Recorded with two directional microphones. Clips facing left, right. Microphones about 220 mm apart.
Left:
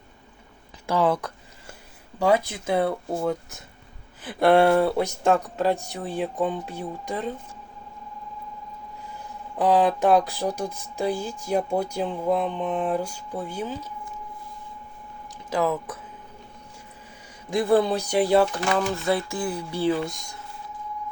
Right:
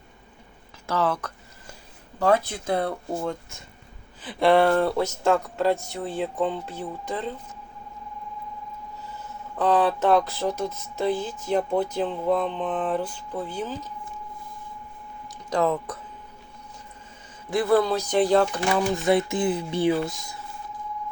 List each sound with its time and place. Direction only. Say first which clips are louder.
0.9 s a sound: left 3 dB; 15° left (ahead or behind)
2.1 s speech: even; 10° left (ahead or behind)
9.6 s speech: left 1 dB; 15° left (ahead or behind)
15.4 s speech: right 1 dB; 5° left (ahead or behind)
17.5 s speech: even; 20° left (ahead or behind)
18.7 s speech: right 2 dB; 15° right (ahead or behind)
19.9 s speech: right 1 dB; centre (ahead or behind)